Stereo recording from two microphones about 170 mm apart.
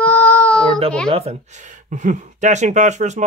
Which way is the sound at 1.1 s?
40° right (ahead or behind).